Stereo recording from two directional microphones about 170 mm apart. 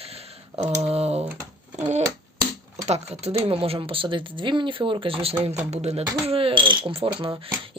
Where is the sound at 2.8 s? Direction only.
40° right (ahead or behind).